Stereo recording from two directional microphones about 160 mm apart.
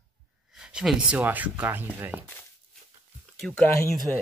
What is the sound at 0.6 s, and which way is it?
Speech, 5° right (ahead or behind).